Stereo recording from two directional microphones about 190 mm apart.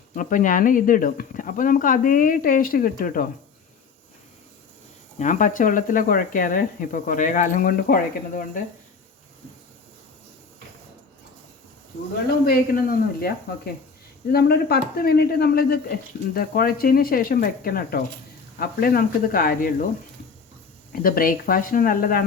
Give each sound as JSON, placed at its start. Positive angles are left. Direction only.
{"t": 0.1, "sound": "speech", "side_deg": 45}
{"t": 5.2, "sound": "speech", "side_deg": 40}
{"t": 12.5, "sound": "speech", "side_deg": 50}
{"t": 20.9, "sound": "speech", "side_deg": 50}